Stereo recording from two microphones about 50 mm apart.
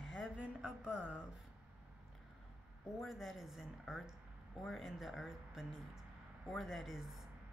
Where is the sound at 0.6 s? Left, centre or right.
Centre.